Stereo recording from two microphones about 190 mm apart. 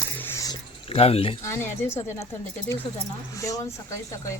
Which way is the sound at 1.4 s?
15° left (ahead or behind).